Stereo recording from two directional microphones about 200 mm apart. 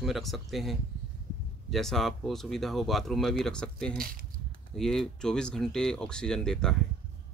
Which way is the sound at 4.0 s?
45° right (ahead or behind).